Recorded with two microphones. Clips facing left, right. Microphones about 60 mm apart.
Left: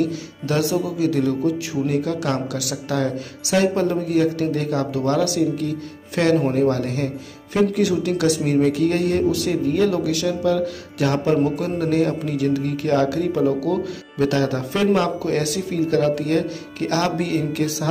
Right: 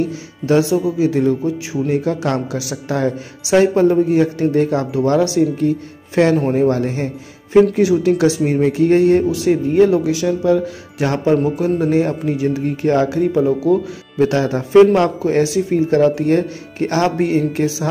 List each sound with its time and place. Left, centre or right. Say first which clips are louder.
0.0 s speech: right 1 dB; right
2.0 s speech: right 3 dB; right